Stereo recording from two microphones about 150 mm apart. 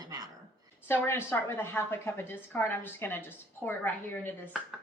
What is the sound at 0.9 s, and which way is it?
A woman's voice, 15° left (ahead or behind).